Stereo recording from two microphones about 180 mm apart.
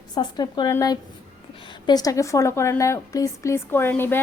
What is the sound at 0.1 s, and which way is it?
A woman's voice, 25° left (ahead or behind).